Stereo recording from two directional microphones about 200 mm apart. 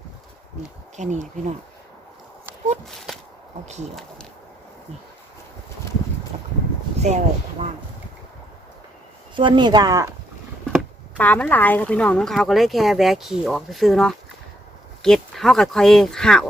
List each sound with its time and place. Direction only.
0.9 s speech: 35° right (ahead or behind)
6.3 s boat: 35° right (ahead or behind)
7.1 s speech: 35° right (ahead or behind)
9.3 s speech: 25° right (ahead or behind)
10.7 s speech: 5° left (ahead or behind)